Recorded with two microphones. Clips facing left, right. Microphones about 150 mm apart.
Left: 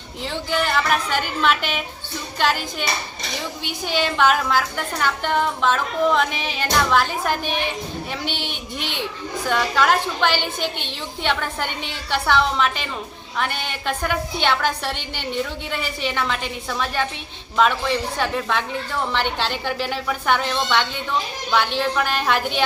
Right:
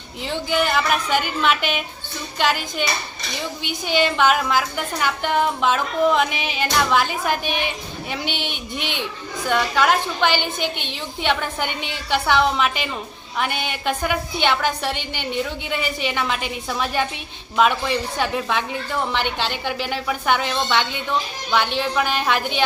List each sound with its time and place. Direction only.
0.3 s a woman's voice: 5° right (ahead or behind)
3.8 s a woman's voice: centre (ahead or behind)
8.8 s a child's voice: 35° left (ahead or behind)
9.5 s a woman's voice: centre (ahead or behind)